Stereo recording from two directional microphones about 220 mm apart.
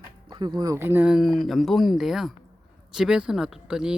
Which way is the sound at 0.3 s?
20° right (ahead or behind).